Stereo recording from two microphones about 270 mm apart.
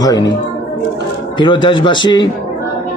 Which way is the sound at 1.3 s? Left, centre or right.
Centre.